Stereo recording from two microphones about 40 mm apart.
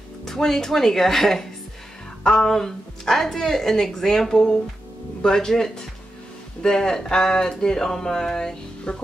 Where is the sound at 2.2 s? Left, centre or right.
Centre.